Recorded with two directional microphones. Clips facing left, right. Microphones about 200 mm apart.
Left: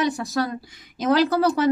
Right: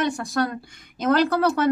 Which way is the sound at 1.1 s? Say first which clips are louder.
Left 1 dB; 50° right (ahead or behind).